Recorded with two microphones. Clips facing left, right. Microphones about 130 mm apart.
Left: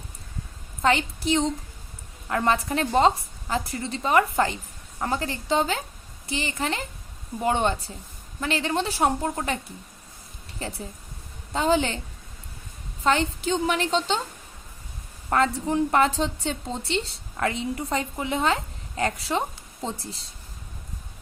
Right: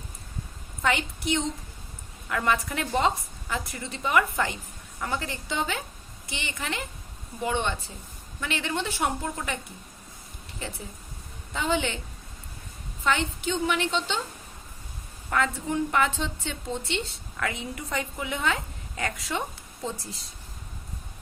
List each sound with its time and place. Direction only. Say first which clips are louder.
0.8 s a woman's voice: left 4 dB; 30° left (ahead or behind)
10.6 s a woman's voice: left 4 dB; 35° left (ahead or behind)
13.1 s a woman's voice: left 4 dB; 35° left (ahead or behind)
15.3 s a woman's voice: left 4 dB; 35° left (ahead or behind)